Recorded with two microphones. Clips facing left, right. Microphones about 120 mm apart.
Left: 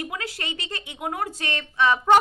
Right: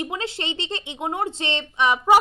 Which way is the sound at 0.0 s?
25° right (ahead or behind).